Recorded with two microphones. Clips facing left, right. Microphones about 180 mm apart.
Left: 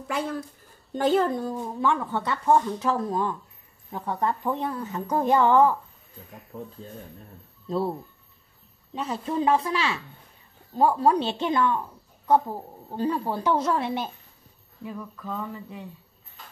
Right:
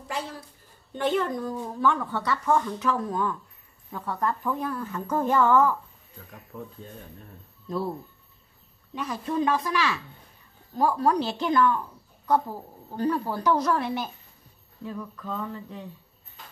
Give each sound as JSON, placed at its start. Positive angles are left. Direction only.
{"t": 0.1, "sound": "speech", "side_deg": 55}
{"t": 0.9, "sound": "speech", "side_deg": 35}
{"t": 6.5, "sound": "speech", "side_deg": 30}
{"t": 8.9, "sound": "speech", "side_deg": 30}
{"t": 14.8, "sound": "a sound", "side_deg": 10}